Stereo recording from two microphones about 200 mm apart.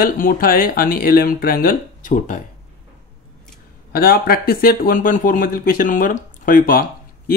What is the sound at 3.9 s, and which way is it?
Speech, 50° left (ahead or behind).